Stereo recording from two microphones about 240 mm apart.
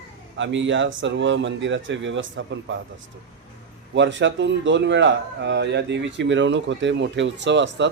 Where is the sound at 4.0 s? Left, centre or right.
Right.